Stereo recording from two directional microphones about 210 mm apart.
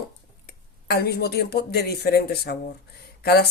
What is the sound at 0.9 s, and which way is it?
Speech, 45° left (ahead or behind).